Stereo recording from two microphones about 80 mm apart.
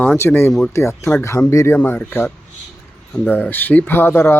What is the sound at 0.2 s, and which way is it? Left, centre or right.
Speech, left.